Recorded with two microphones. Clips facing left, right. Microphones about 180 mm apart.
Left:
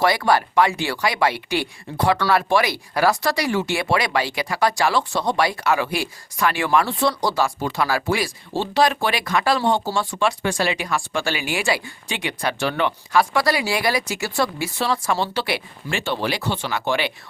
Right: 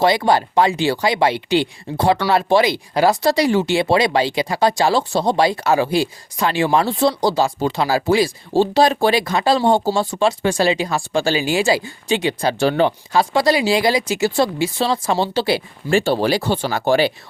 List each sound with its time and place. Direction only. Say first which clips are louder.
0.0 s speech: right 3 dB; 25° right (ahead or behind)